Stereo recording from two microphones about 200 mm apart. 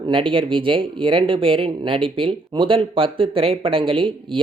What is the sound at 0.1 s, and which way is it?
Speech, 25° right (ahead or behind).